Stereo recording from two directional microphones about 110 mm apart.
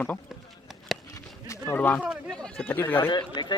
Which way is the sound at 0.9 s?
Centre (ahead or behind).